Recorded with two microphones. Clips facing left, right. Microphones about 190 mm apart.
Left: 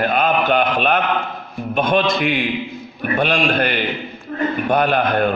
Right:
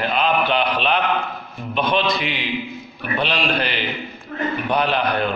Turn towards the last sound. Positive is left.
turn(degrees=50)  # may be behind; listen again after turning